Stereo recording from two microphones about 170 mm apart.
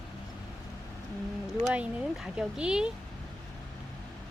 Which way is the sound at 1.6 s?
5° right (ahead or behind).